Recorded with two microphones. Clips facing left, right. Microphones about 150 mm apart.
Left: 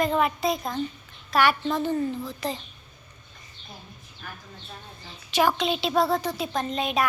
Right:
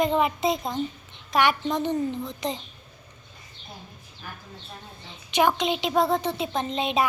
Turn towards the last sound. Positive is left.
turn(degrees=-25)  # may be behind; listen again after turning